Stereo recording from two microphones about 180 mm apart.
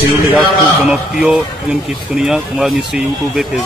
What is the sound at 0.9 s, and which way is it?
Speech, 5° right (ahead or behind).